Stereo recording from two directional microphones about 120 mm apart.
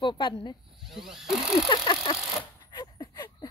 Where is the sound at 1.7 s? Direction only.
45° left (ahead or behind).